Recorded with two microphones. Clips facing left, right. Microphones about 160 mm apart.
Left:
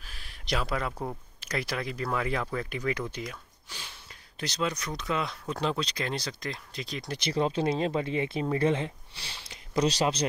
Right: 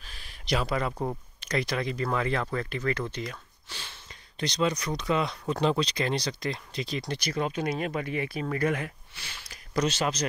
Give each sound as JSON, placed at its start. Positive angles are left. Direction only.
{"t": 0.0, "sound": "a sound", "side_deg": 0}
{"t": 1.4, "sound": "speech", "side_deg": 5}
{"t": 7.2, "sound": "speech", "side_deg": 25}